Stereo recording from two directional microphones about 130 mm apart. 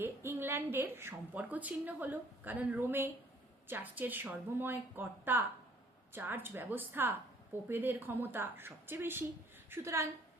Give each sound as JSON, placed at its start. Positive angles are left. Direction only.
{"t": 0.0, "sound": "a woman's voice", "side_deg": -20}